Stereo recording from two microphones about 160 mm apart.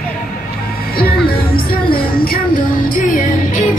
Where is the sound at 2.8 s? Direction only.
60° left (ahead or behind).